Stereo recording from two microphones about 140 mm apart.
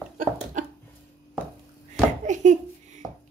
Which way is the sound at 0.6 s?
65° right (ahead or behind).